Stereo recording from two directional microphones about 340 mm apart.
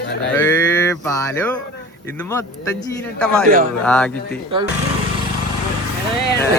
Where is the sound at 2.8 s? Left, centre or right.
Centre.